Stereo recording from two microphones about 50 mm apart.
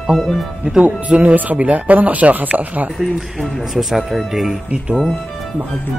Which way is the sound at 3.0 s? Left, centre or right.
Centre.